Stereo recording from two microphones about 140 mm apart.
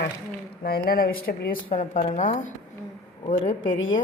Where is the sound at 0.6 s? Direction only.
90° left.